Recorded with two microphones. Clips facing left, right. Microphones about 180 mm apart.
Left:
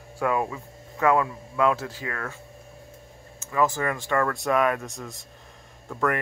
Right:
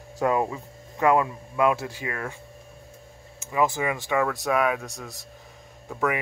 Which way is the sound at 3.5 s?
10° right (ahead or behind).